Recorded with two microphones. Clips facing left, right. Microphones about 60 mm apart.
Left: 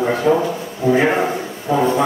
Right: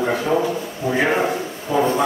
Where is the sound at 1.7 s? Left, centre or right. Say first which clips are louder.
Left 2 dB; left.